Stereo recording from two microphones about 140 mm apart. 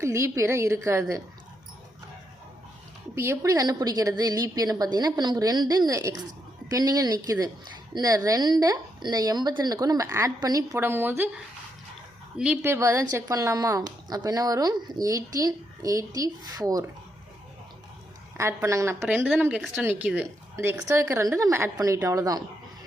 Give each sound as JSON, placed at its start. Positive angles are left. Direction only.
{"t": 0.0, "sound": "a woman's voice", "side_deg": -20}
{"t": 3.2, "sound": "a woman's voice", "side_deg": -20}
{"t": 12.6, "sound": "a woman's voice", "side_deg": -20}
{"t": 18.3, "sound": "a woman's voice", "side_deg": -20}